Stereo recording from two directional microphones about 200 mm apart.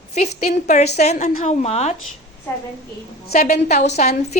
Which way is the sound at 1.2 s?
40° left (ahead or behind).